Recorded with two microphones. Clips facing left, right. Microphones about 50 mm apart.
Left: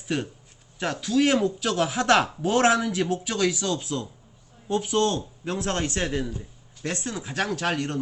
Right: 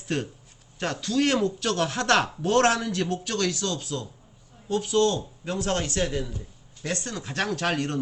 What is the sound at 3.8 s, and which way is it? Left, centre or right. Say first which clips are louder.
A man's voice: left 2 dB; left.